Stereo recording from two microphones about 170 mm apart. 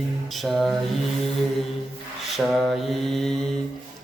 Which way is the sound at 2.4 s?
Centre (ahead or behind).